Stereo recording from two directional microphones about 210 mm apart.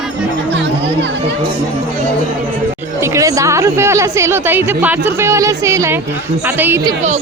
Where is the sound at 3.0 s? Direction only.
15° right (ahead or behind).